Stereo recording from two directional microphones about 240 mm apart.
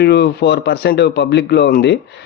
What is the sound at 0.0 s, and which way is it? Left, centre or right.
A man's voice, left.